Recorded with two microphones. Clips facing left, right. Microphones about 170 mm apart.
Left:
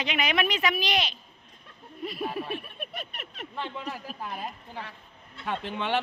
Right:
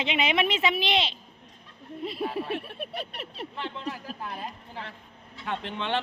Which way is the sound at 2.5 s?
75° right (ahead or behind).